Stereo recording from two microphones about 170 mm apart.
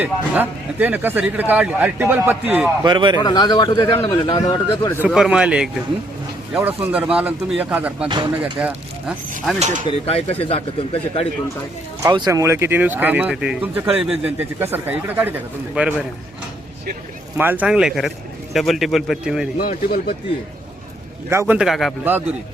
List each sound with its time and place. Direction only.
0.0 s a man's voice: 10° right (ahead or behind)
2.8 s a man's voice: 25° right (ahead or behind)
3.2 s a man's voice: 25° left (ahead or behind)
5.0 s a man's voice: 5° right (ahead or behind)
8.0 s a man's voice: 25° right (ahead or behind)
8.4 s speech: 5° right (ahead or behind)
9.6 s speech: 45° right (ahead or behind)
10.1 s speech: 35° left (ahead or behind)
12.0 s a man's voice: 20° right (ahead or behind); by 16.0 s 5° right (ahead or behind)
17.3 s a man's voice: 10° right (ahead or behind)
19.6 s speech: 55° left (ahead or behind)
21.2 s a man's voice: 15° right (ahead or behind)
22.0 s a man's voice: 10° right (ahead or behind)